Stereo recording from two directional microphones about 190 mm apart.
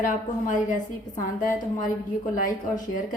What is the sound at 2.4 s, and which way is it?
Speech, 45° left (ahead or behind).